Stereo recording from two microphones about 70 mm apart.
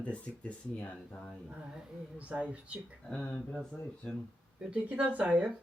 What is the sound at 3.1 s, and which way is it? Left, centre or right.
Speech, centre.